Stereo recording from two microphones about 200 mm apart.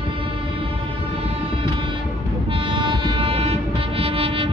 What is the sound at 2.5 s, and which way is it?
Train, 25° right (ahead or behind).